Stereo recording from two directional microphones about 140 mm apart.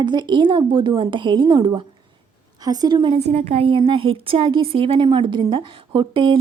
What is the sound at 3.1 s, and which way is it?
A woman's voice, 50° right (ahead or behind).